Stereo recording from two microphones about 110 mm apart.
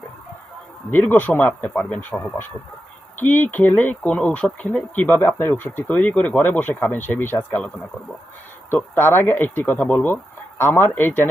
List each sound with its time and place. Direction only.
0.9 s speech: 15° left (ahead or behind)
8.7 s speech: 20° left (ahead or behind)